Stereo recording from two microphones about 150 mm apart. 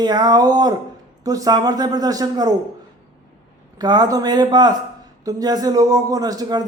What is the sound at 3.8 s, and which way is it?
Speech, 25° right (ahead or behind).